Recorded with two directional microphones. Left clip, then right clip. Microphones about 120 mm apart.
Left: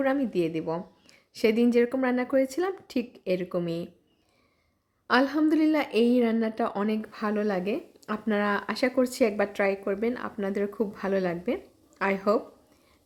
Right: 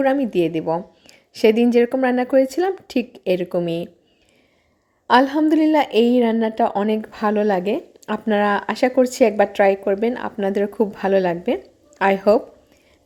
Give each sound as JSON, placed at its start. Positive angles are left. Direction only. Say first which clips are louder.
{"t": 0.0, "sound": "speech", "louder": "right 8 dB", "side_deg": -30}
{"t": 5.0, "sound": "speech", "louder": "right 8 dB", "side_deg": -25}